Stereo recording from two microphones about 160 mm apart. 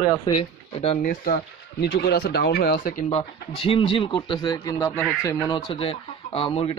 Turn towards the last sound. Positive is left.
turn(degrees=35)  # may be behind; listen again after turning